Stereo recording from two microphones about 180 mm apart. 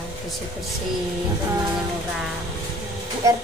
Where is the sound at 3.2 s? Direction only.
15° right (ahead or behind).